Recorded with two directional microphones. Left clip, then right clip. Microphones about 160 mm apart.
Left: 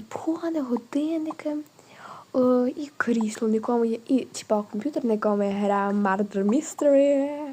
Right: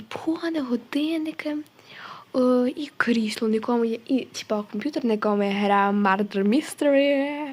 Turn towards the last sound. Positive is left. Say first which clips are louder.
# even
turn(degrees=-25)  # may be behind; listen again after turning